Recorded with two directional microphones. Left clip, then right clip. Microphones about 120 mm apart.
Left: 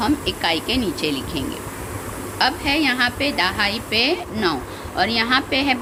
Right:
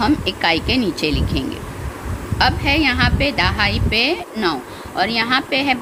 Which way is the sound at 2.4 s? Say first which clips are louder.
Right 3 dB; 45° right (ahead or behind).